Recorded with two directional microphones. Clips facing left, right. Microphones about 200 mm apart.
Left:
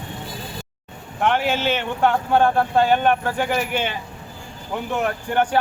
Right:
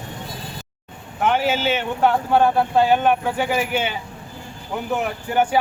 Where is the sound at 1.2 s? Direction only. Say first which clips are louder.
Right 1 dB; 5° right (ahead or behind).